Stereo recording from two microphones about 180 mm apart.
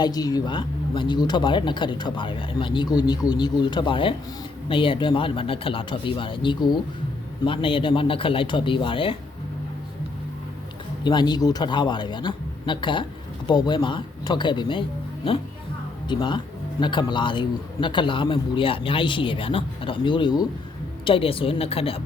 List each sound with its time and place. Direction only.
0.0 s speech: 20° left (ahead or behind)
11.0 s a woman's voice: 25° left (ahead or behind)